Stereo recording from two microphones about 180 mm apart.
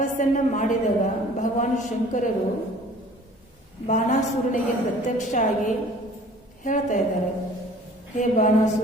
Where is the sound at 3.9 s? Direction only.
45° left (ahead or behind).